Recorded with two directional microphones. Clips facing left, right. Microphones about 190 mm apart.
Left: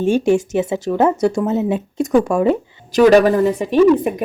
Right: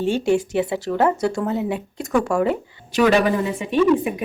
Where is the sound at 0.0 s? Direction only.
15° left (ahead or behind).